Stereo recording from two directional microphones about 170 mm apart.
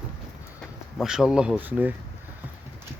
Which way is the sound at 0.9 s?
5° right (ahead or behind).